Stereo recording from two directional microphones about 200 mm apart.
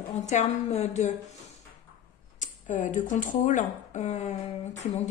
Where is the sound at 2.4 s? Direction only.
40° left (ahead or behind).